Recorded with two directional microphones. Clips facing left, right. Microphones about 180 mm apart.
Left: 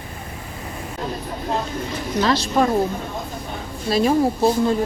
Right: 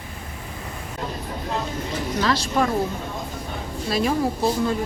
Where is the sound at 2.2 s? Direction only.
25° left (ahead or behind).